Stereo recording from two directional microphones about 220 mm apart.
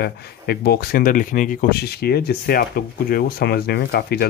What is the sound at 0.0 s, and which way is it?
Speech, 45° left (ahead or behind).